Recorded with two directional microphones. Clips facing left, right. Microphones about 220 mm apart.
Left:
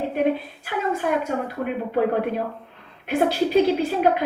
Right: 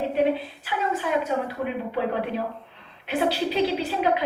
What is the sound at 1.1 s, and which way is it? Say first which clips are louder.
A woman's voice: left 1 dB; 50° left (ahead or behind).